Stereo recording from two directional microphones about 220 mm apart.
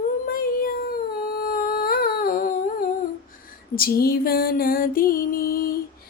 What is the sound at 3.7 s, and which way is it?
Music, 40° left (ahead or behind).